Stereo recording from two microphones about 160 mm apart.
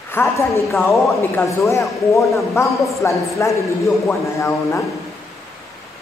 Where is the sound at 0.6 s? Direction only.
Centre (ahead or behind).